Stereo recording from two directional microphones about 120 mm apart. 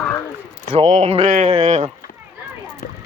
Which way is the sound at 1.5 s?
65° right (ahead or behind).